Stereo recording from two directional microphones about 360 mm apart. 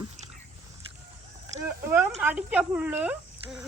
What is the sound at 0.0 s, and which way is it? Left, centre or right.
Biting, centre.